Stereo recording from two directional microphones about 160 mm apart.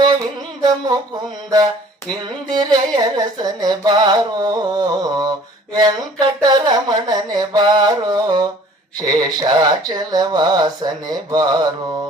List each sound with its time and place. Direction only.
1.5 s music: 25° right (ahead or behind)